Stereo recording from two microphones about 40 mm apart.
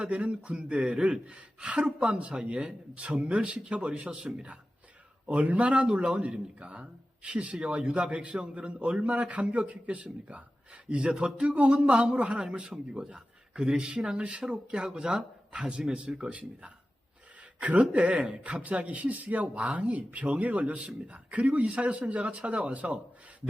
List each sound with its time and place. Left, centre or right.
0.0 s speech: right
5.2 s speech: right